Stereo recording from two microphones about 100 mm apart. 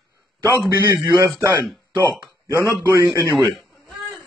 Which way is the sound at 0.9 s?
35° right (ahead or behind).